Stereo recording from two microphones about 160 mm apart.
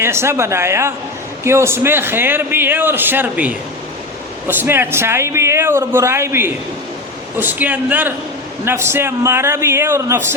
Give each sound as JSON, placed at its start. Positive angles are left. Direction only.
{"t": 0.0, "sound": "a man's voice", "side_deg": -15}